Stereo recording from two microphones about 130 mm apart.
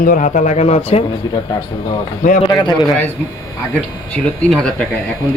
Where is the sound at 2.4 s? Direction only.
35° left (ahead or behind).